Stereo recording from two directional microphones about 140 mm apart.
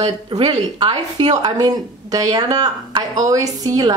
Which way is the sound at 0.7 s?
35° right (ahead or behind).